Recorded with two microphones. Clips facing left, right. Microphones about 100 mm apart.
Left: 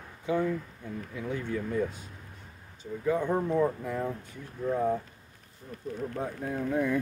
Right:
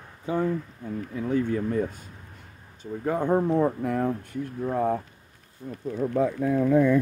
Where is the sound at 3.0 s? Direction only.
55° right (ahead or behind).